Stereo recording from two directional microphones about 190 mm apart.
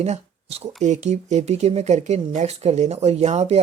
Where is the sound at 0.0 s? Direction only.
35° right (ahead or behind).